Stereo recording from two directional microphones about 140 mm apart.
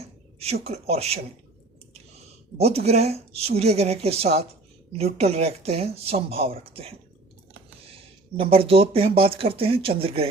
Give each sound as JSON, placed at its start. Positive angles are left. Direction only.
{"t": 0.3, "sound": "speech", "side_deg": -45}
{"t": 2.6, "sound": "speech", "side_deg": -50}
{"t": 8.4, "sound": "speech", "side_deg": -45}